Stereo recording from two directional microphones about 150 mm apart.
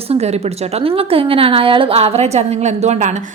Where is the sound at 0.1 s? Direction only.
45° right (ahead or behind).